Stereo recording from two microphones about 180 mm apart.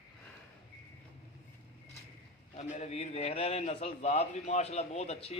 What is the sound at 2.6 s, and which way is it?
A man's voice, 40° left (ahead or behind).